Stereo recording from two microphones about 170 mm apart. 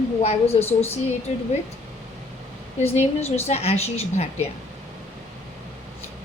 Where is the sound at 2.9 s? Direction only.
40° left (ahead or behind).